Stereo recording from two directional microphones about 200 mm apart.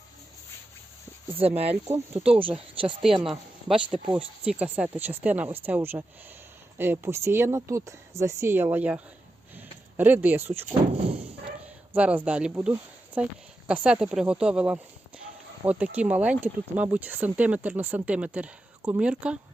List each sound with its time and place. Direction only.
1.4 s speech: 30° right (ahead or behind)
3.0 s speech: centre (ahead or behind)
3.8 s speech: 25° right (ahead or behind)
4.1 s speech: 5° right (ahead or behind)
9.6 s a sound: 10° right (ahead or behind)
11.9 s speech: 5° right (ahead or behind)